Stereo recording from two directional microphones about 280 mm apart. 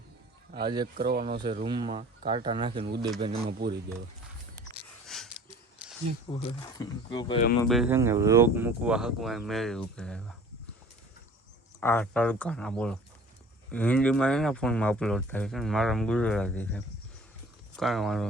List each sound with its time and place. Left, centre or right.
0.5 s a sound: right
0.9 s speech: right
1.4 s speech: centre
3.4 s speech: right
4.5 s a sound: centre
6.3 s speech: centre
7.7 s speech: centre
11.8 s speech: centre